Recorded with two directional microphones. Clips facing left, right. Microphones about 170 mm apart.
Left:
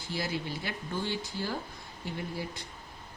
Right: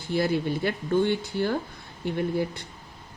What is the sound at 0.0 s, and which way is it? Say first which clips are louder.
Speech: right 10 dB; 55° right (ahead or behind).